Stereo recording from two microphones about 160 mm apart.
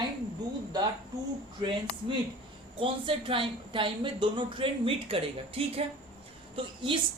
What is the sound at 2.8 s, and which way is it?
A woman's voice, 35° right (ahead or behind).